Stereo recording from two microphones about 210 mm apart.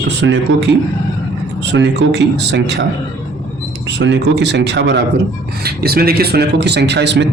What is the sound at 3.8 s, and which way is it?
A man's voice, 60° right (ahead or behind).